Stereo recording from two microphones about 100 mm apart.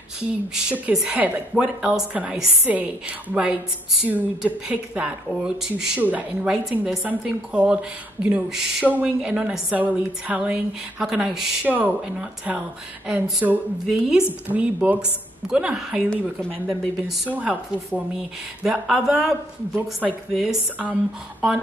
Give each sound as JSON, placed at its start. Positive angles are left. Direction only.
{"t": 0.6, "sound": "a woman's voice", "side_deg": -10}
{"t": 5.9, "sound": "a woman's voice", "side_deg": -15}
{"t": 6.4, "sound": "a woman's voice", "side_deg": -5}
{"t": 11.6, "sound": "a woman's voice", "side_deg": -15}
{"t": 20.3, "sound": "a woman's voice", "side_deg": -5}